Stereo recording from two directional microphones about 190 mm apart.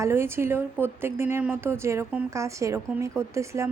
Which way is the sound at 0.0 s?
15° right (ahead or behind).